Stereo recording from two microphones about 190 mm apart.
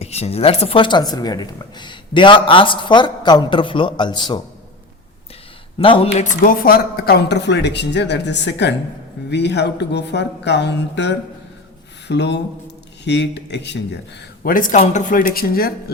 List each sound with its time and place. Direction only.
0.0 s speech: 35° left (ahead or behind)
5.8 s speech: 30° left (ahead or behind); by 14.0 s 65° left (ahead or behind)
14.4 s speech: 45° left (ahead or behind)